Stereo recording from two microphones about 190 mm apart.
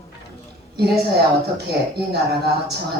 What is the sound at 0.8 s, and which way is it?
A woman's voice, 60° right (ahead or behind).